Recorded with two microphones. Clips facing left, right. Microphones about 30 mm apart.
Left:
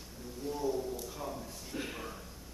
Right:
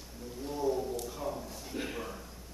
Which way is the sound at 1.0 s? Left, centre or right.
Centre.